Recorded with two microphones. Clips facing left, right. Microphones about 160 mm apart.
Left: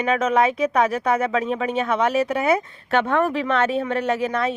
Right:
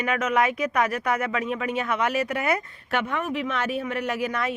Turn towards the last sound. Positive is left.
turn(degrees=25)  # may be behind; listen again after turning